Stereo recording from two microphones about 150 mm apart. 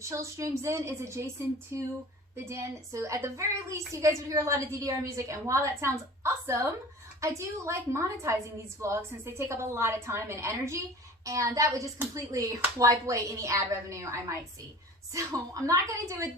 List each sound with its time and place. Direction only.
0.0 s a woman's voice: 20° right (ahead or behind)